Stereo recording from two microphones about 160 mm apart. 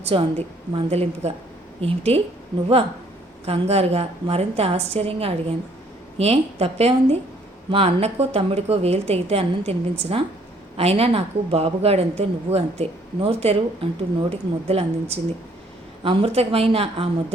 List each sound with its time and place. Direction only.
0.0 s a woman's voice: 40° right (ahead or behind)
3.4 s a woman's voice: 40° right (ahead or behind)